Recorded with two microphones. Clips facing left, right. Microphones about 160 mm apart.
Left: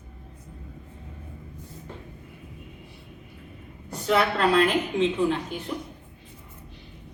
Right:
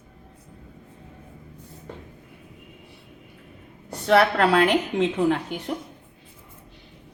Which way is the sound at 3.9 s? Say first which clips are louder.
Right 4 dB; 70° right (ahead or behind).